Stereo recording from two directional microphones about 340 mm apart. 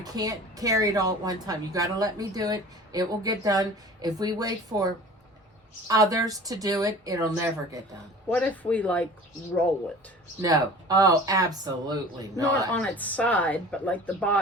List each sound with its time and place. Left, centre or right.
0.0 s a woman's voice: centre
5.9 s a woman's voice: centre
8.3 s speech: centre
10.4 s a woman's voice: centre
12.7 s speech: centre